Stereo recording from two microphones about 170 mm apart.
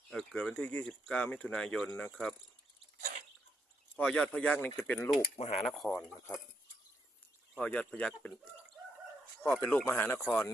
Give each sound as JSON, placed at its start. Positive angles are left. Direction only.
{"t": 0.1, "sound": "speech", "side_deg": 5}
{"t": 3.0, "sound": "sneeze", "side_deg": -45}
{"t": 3.9, "sound": "speech", "side_deg": 5}
{"t": 5.4, "sound": "speech", "side_deg": 40}
{"t": 5.6, "sound": "speech", "side_deg": 0}
{"t": 7.6, "sound": "speech", "side_deg": 10}
{"t": 9.4, "sound": "speech", "side_deg": 10}